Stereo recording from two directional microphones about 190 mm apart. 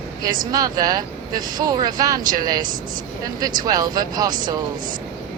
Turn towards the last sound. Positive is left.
turn(degrees=-20)  # may be behind; listen again after turning